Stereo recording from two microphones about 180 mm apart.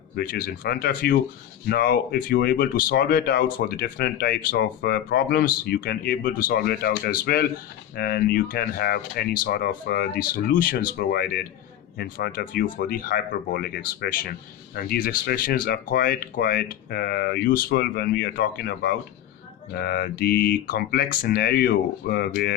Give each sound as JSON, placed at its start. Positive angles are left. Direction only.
{"t": 0.2, "sound": "speech", "side_deg": 55}